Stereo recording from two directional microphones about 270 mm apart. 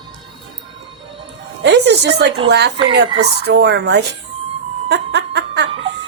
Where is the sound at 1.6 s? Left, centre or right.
Right.